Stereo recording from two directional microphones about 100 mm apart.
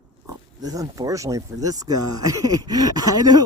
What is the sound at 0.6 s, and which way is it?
Speech, 35° right (ahead or behind).